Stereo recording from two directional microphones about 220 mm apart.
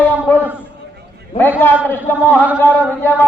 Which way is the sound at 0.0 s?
10° left (ahead or behind).